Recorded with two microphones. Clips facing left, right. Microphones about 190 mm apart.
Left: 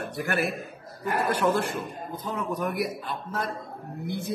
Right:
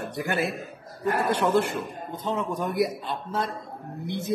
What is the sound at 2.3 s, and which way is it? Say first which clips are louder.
A man's voice: right 2 dB; 25° right (ahead or behind).